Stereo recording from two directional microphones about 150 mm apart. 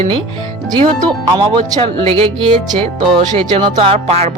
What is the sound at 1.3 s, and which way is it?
Speech, 30° right (ahead or behind).